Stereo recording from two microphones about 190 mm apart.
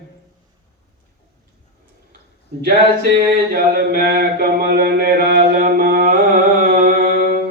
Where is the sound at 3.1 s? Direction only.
55° right (ahead or behind).